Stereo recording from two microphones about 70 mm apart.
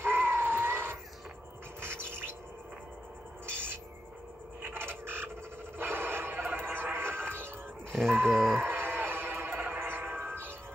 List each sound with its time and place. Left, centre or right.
0.0 s vehicle: right
1.8 s bird: right
4.6 s a sound: right
5.8 s music: right
7.9 s groan: centre
8.5 s a sound: right